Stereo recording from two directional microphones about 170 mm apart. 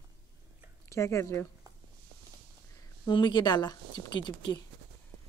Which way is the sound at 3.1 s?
25° left (ahead or behind).